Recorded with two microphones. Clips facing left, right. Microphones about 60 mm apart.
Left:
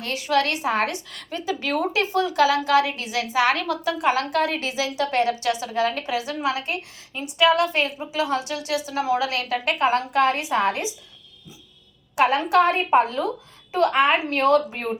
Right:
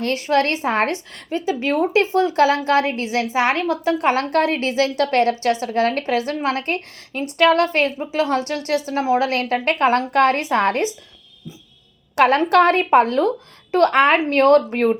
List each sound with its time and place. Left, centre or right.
0.0 s a woman's voice: right
4.0 s a woman's voice: right
5.3 s a woman's voice: right
12.1 s a woman's voice: right